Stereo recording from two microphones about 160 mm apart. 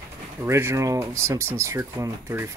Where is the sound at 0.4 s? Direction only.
15° right (ahead or behind).